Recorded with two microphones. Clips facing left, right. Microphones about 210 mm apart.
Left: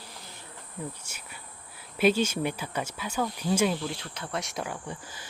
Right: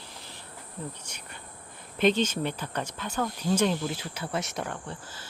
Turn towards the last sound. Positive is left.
turn(degrees=0)  # may be behind; listen again after turning